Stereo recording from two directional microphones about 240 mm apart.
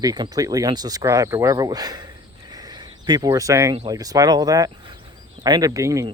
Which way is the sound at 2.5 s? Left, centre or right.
Centre.